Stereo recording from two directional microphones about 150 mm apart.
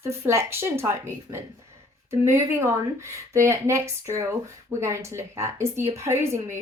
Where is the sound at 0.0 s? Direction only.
20° right (ahead or behind).